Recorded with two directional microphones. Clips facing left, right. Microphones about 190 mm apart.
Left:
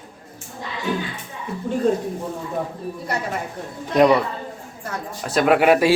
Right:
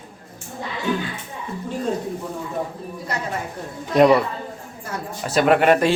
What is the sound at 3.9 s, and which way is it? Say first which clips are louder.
A man's voice: right 1 dB; centre (ahead or behind).